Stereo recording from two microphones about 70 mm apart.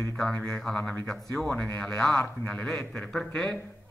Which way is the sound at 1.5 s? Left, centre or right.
Left.